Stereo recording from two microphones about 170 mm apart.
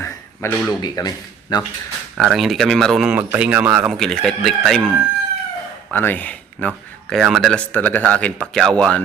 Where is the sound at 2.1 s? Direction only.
Centre (ahead or behind).